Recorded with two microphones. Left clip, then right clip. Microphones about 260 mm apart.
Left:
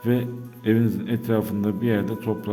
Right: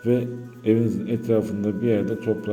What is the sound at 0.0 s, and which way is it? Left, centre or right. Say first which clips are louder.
Speech: right 2 dB; centre.